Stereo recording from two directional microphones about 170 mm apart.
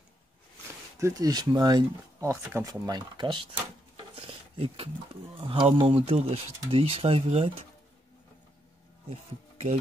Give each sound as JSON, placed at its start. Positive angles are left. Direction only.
{"t": 0.9, "sound": "speech", "side_deg": -20}
{"t": 4.1, "sound": "stir", "side_deg": -35}
{"t": 5.4, "sound": "speech", "side_deg": -30}
{"t": 9.1, "sound": "speech", "side_deg": -40}